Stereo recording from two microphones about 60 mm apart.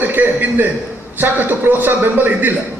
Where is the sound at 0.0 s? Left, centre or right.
Right.